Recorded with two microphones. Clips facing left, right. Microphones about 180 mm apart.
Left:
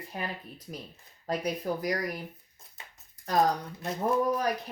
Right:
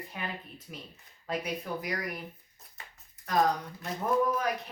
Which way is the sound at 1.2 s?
35° left (ahead or behind).